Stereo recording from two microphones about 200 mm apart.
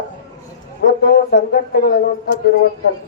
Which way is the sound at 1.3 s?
55° left (ahead or behind).